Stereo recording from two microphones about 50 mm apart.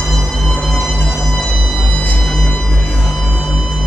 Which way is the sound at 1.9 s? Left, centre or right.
Left.